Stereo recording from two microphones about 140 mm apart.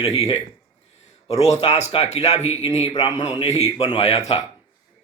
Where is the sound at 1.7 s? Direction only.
50° left (ahead or behind).